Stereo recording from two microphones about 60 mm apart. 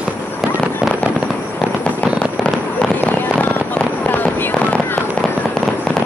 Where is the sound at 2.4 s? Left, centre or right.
Centre.